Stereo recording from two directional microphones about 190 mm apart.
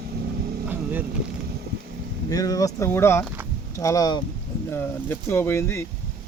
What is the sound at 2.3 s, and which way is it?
Speech, 20° left (ahead or behind).